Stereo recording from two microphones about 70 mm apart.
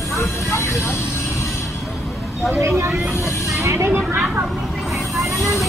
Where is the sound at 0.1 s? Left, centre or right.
Left.